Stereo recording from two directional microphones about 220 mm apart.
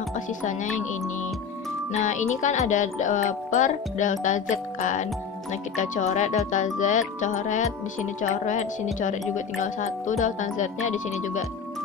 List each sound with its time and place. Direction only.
1.9 s speech: 35° left (ahead or behind)